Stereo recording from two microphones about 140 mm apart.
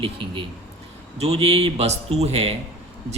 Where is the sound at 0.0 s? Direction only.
40° right (ahead or behind).